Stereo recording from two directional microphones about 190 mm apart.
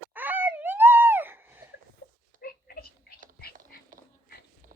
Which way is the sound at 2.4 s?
55° left (ahead or behind).